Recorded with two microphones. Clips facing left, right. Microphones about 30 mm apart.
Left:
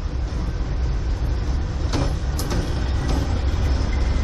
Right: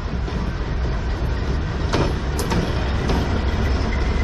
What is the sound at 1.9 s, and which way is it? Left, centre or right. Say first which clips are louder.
Vehicle: right 5 dB; right.